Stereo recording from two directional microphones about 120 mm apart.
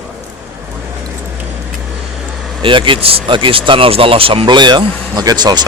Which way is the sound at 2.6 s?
45° right (ahead or behind).